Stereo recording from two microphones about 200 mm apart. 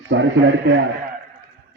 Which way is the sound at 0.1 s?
65° right (ahead or behind).